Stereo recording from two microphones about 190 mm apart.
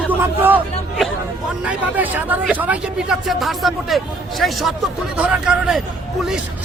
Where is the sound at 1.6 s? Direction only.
10° right (ahead or behind).